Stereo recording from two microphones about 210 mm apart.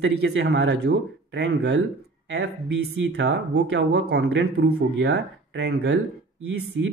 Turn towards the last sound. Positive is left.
turn(degrees=-60)  # may be behind; listen again after turning